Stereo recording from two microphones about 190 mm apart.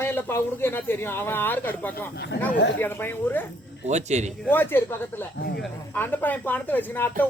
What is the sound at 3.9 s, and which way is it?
Speech, 35° right (ahead or behind).